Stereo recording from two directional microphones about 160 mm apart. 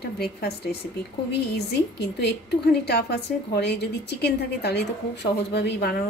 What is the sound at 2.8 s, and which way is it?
A woman's voice, 90° left.